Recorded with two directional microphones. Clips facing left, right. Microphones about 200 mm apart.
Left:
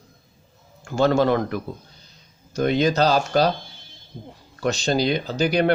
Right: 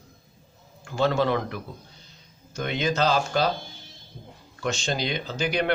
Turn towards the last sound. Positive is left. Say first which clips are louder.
# left 6 dB
turn(degrees=40)  # may be behind; listen again after turning